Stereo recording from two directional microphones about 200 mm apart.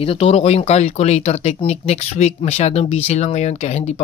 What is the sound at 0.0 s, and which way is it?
Speech, 30° left (ahead or behind).